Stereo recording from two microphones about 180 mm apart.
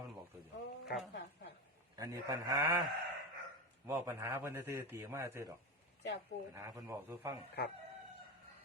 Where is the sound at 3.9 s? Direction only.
15° right (ahead or behind).